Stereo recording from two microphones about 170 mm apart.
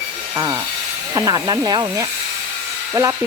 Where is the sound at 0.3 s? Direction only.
20° right (ahead or behind).